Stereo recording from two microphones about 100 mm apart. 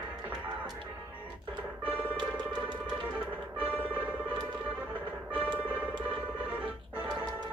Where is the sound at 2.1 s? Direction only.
50° right (ahead or behind).